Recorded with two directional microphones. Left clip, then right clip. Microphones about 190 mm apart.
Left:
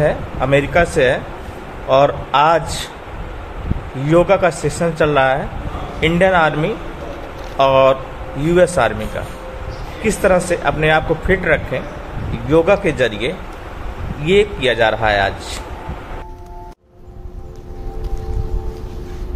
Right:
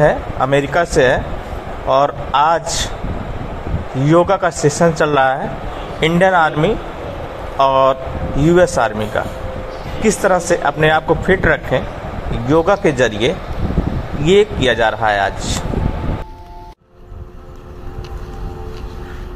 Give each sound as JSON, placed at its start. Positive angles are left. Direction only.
{"t": 0.0, "sound": "a man's voice", "side_deg": -15}
{"t": 4.0, "sound": "a man's voice", "side_deg": -15}
{"t": 7.5, "sound": "a man's voice", "side_deg": -15}